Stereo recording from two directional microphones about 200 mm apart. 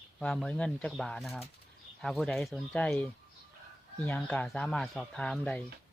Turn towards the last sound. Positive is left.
turn(degrees=5)  # may be behind; listen again after turning